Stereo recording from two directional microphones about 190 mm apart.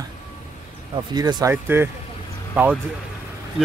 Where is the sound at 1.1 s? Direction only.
20° right (ahead or behind).